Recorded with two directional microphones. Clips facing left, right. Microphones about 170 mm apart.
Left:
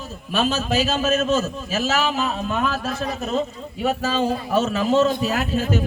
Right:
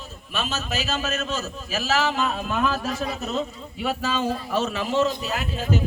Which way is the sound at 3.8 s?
40° left (ahead or behind).